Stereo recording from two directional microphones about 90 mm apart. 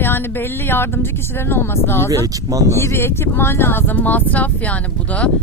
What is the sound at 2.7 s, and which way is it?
Speech, 30° left (ahead or behind).